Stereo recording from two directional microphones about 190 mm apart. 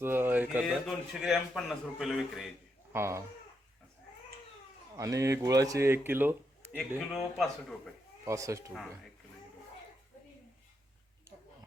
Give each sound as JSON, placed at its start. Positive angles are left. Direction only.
{"t": 0.0, "sound": "a man's voice", "side_deg": -10}
{"t": 2.9, "sound": "speech", "side_deg": -15}
{"t": 4.9, "sound": "a man's voice", "side_deg": -15}
{"t": 8.2, "sound": "speech", "side_deg": -15}